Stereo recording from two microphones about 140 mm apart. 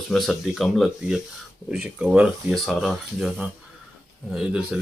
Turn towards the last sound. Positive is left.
turn(degrees=-5)  # may be behind; listen again after turning